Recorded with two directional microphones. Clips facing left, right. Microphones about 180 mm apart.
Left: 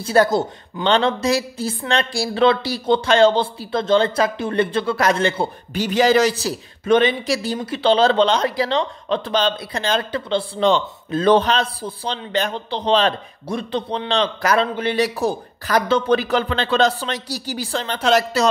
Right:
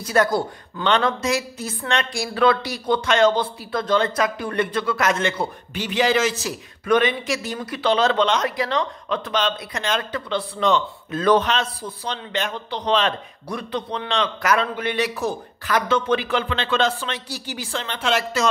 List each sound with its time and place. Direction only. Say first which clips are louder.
0.0 s a woman's voice: left 3 dB; 30° left (ahead or behind)
5.8 s a man's voice: left 5 dB; 40° left (ahead or behind)